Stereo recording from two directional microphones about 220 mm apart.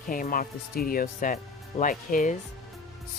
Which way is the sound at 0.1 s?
40° left (ahead or behind).